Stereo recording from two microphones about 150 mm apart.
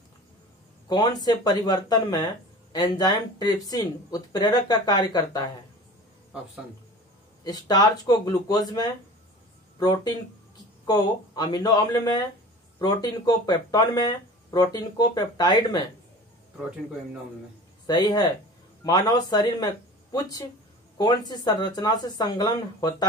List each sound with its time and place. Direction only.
0.8 s speech: 25° left (ahead or behind)
7.4 s speech: 25° left (ahead or behind)
17.8 s speech: 25° left (ahead or behind)